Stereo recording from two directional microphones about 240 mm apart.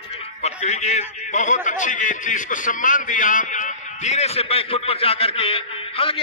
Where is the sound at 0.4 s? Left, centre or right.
Left.